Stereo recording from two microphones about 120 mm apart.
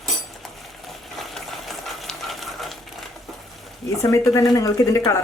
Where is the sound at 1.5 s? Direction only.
Centre (ahead or behind).